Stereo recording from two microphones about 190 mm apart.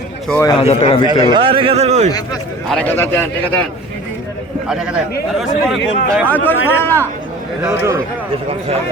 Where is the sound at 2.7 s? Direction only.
10° left (ahead or behind).